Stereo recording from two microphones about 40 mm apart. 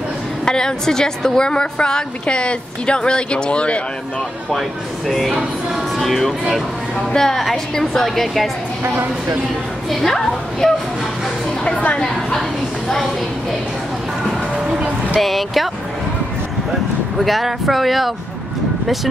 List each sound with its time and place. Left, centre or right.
0.5 s a woman's voice: centre
4.5 s speech: centre
5.3 s music: centre
5.9 s a woman's voice: centre
10.0 s a woman's voice: centre
11.6 s a woman's voice: left
12.4 s a woman's voice: centre
15.1 s speech: centre
17.2 s speech: centre